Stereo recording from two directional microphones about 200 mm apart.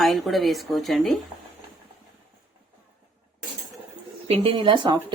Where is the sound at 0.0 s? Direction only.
Centre (ahead or behind).